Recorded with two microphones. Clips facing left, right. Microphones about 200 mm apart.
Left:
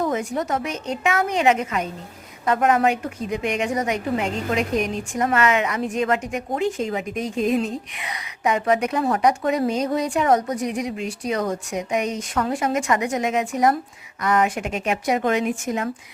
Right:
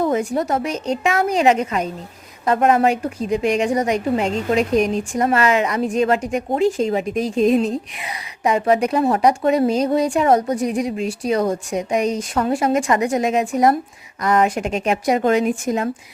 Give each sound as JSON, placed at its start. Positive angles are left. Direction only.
{"t": 0.0, "sound": "a woman's voice", "side_deg": -30}